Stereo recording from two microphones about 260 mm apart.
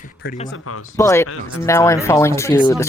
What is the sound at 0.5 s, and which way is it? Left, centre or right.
Speech, left.